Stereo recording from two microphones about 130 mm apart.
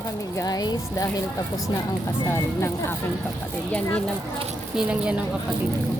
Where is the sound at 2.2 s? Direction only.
20° left (ahead or behind).